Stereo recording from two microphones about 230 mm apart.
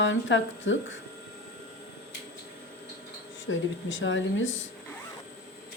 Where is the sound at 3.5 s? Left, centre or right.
Left.